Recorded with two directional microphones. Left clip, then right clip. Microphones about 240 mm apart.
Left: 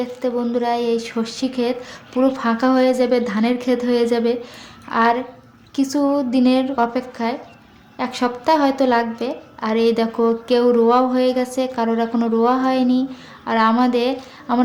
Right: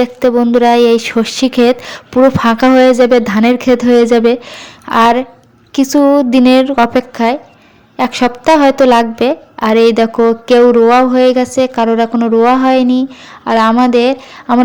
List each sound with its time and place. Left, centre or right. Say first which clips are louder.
0.0 s a woman's voice: right 11 dB; right